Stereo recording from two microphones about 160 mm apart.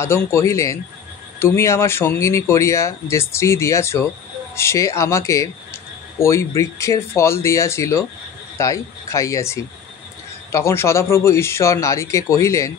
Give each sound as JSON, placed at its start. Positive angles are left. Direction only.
{"t": 0.0, "sound": "speech", "side_deg": 15}